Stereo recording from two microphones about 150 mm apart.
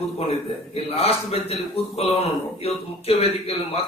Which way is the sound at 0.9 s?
45° left (ahead or behind).